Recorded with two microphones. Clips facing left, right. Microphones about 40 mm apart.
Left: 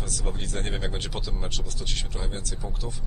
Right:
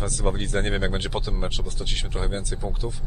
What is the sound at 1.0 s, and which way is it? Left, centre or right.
Speech, right.